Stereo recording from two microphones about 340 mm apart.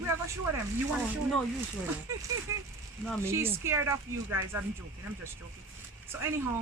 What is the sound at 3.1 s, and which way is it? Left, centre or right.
Speech, centre.